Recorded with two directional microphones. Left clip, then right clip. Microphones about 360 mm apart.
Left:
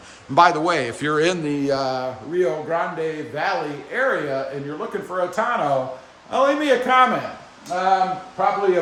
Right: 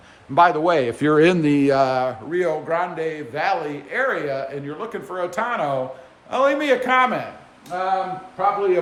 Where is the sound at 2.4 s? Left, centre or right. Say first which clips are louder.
Even; centre.